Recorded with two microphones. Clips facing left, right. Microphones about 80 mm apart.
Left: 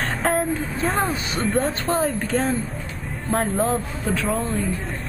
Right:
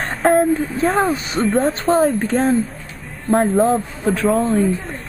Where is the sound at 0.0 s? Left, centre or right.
Centre.